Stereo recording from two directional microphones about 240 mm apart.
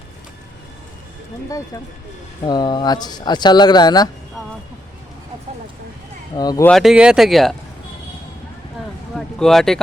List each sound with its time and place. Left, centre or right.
1.5 s speech: centre
6.3 s speech: centre
6.7 s speech: centre
9.1 s a sound: centre